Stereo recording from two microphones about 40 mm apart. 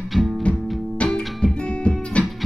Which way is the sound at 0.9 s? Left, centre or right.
Left.